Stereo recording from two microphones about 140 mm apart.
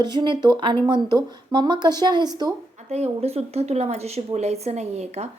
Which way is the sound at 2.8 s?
50° right (ahead or behind).